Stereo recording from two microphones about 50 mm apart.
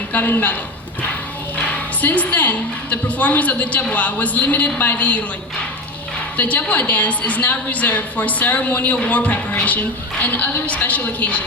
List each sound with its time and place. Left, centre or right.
0.1 s a woman's voice: left
2.0 s a woman's voice: left
6.3 s a woman's voice: left